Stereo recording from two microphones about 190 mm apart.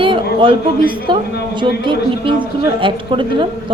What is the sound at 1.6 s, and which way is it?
A woman's voice, 25° right (ahead or behind).